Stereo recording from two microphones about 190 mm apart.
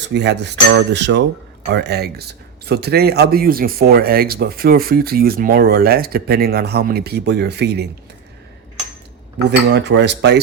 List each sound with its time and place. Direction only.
0.1 s cutlery: 65° right (ahead or behind)
1.6 s speech: 60° right (ahead or behind)
9.5 s speech: 60° right (ahead or behind)